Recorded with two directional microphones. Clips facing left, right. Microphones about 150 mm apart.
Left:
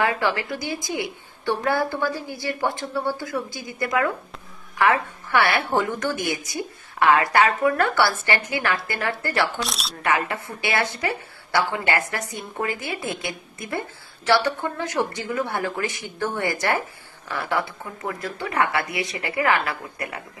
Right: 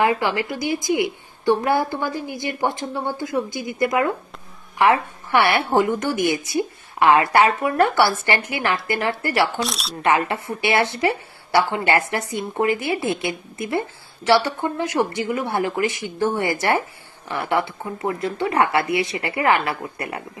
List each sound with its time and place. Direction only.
0.0 s a woman's voice: 15° right (ahead or behind)
9.6 s speech: centre (ahead or behind)
10.0 s a woman's voice: 25° right (ahead or behind)